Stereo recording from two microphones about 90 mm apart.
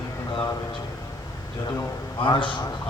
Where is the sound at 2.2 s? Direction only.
65° left (ahead or behind).